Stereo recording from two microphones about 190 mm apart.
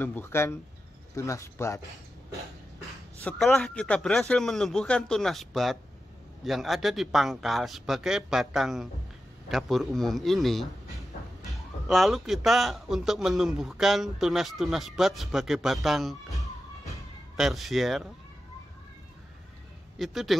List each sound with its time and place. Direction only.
0.0 s speech: 10° left (ahead or behind)
3.3 s a man's voice: centre (ahead or behind)
11.5 s police car: centre (ahead or behind)
12.4 s speech: centre (ahead or behind)
17.4 s speech: centre (ahead or behind)
20.0 s speech: centre (ahead or behind)